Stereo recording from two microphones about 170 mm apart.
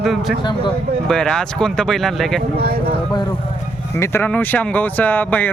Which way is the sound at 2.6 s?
65° right (ahead or behind).